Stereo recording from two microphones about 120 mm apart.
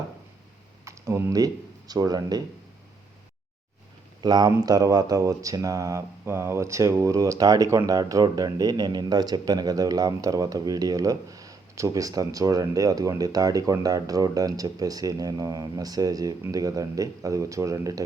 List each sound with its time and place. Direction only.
0.9 s speech: 25° right (ahead or behind)
4.2 s speech: 35° right (ahead or behind)